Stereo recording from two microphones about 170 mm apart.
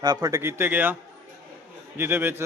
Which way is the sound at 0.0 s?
25° right (ahead or behind).